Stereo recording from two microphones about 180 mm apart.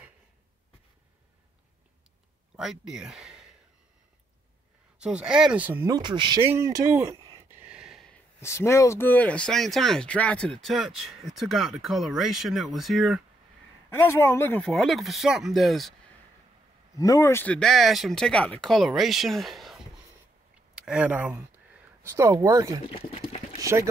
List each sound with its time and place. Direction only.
2.5 s speech: 5° right (ahead or behind)
4.9 s speech: 5° right (ahead or behind)
5.9 s speech: 25° right (ahead or behind)
6.4 s speech: 15° right (ahead or behind)
7.6 s a sound: 5° right (ahead or behind)
8.4 s speech: 15° left (ahead or behind); by 13.2 s centre (ahead or behind)
13.8 s speech: 15° left (ahead or behind)
16.9 s speech: 20° left (ahead or behind); by 22.7 s 20° right (ahead or behind)
22.8 s speech: 30° left (ahead or behind)
23.6 s speech: 15° right (ahead or behind)